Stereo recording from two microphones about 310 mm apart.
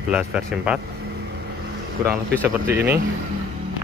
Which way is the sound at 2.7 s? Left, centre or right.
Right.